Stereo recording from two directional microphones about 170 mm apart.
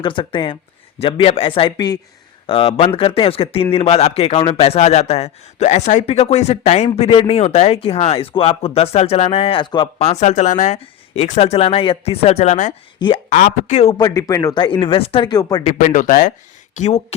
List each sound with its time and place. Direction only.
0.0 s speech: 30° left (ahead or behind)
13.0 s speech: 25° left (ahead or behind)
13.3 s speech: 45° left (ahead or behind)
14.0 s speech: 20° left (ahead or behind)
15.6 s speech: 50° left (ahead or behind)